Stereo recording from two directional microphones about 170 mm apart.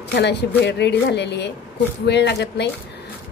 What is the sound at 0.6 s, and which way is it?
A woman's voice, 90° left.